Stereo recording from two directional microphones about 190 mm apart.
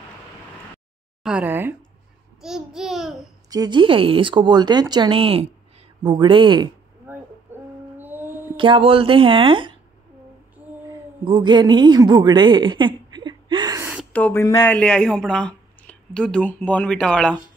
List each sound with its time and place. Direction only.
1.2 s speech: 5° right (ahead or behind)
3.4 s speech: 20° right (ahead or behind)
7.1 s a sound: 10° right (ahead or behind)
8.5 s speech: 25° right (ahead or behind)
10.9 s a sound: 25° right (ahead or behind)
14.1 s speech: 10° left (ahead or behind)